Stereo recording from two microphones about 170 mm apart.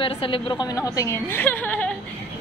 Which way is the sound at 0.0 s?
30° left (ahead or behind).